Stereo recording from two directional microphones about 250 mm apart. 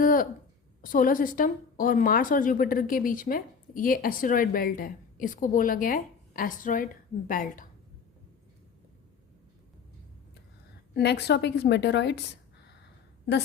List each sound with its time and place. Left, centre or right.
0.0 s a sound: left
0.8 s a woman's voice: left
10.9 s a woman's voice: left